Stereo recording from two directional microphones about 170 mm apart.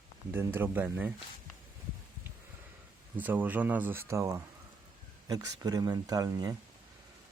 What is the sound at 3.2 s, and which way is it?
Speech, 10° right (ahead or behind).